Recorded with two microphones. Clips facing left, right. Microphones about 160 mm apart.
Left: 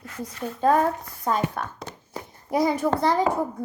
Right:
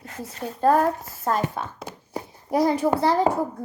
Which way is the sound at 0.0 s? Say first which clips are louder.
Left 1 dB; 35° right (ahead or behind).